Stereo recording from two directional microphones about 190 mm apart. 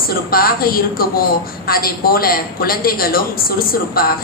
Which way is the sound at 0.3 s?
50° left (ahead or behind).